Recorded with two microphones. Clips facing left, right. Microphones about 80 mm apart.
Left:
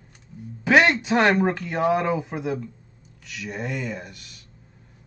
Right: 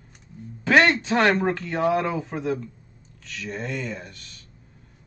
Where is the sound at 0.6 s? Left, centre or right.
Centre.